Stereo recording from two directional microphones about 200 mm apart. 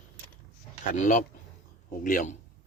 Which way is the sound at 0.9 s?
40° left (ahead or behind).